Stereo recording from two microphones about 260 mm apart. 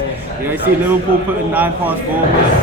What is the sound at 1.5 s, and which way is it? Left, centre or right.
Speech, centre.